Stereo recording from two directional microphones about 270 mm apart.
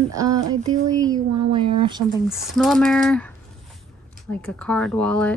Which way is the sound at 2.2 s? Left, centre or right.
Centre.